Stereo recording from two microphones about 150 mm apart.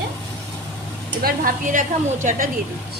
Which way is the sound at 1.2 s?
80° right.